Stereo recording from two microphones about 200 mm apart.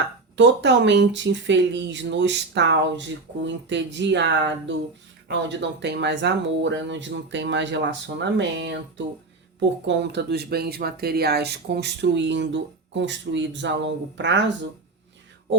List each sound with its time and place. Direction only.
0.3 s speech: 60° right (ahead or behind)